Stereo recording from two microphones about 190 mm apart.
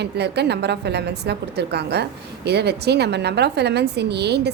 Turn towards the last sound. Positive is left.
turn(degrees=-60)  # may be behind; listen again after turning